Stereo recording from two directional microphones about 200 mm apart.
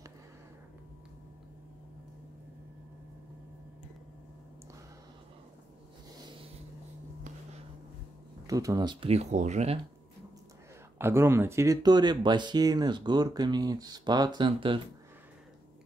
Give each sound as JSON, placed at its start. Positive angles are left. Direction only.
{"t": 8.5, "sound": "speech", "side_deg": -15}
{"t": 11.0, "sound": "speech", "side_deg": -10}